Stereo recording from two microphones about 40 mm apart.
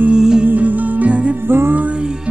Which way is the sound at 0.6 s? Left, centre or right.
Right.